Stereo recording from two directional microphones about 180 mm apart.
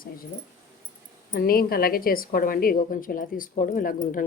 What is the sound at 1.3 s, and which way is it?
Speech, 55° left (ahead or behind).